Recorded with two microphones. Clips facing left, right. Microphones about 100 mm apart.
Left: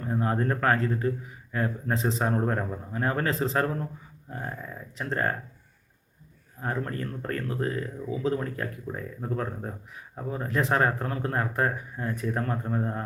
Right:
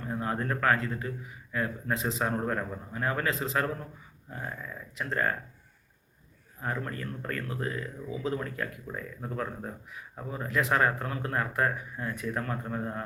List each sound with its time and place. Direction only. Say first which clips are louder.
0.1 s speech: left 5 dB; 30° left (ahead or behind)
6.6 s speech: left 3 dB; 35° left (ahead or behind)